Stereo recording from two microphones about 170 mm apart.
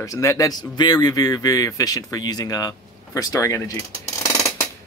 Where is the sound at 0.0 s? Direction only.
20° left (ahead or behind).